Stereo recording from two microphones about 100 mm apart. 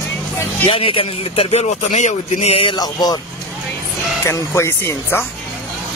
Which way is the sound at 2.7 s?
45° left (ahead or behind).